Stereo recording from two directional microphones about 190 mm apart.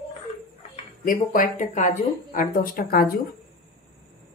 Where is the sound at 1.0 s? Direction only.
45° left (ahead or behind).